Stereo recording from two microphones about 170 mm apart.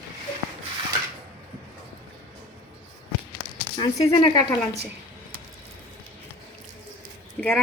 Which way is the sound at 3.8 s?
30° left (ahead or behind).